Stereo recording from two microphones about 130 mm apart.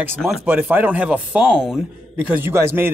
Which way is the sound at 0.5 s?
10° right (ahead or behind).